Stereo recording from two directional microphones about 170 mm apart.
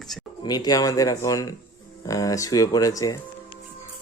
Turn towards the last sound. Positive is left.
turn(degrees=20)  # may be behind; listen again after turning